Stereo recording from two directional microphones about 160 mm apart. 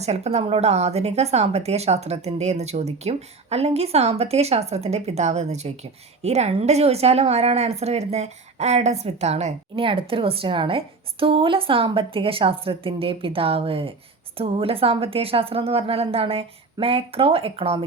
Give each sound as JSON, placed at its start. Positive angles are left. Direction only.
{"t": 0.0, "sound": "speech", "side_deg": -40}